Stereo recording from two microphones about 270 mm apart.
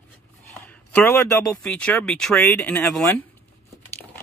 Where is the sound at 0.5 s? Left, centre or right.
Centre.